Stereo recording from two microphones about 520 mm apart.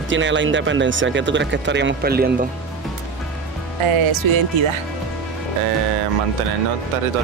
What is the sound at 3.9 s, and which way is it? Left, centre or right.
Speech, right.